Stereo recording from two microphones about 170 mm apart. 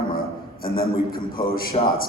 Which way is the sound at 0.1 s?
60° left (ahead or behind).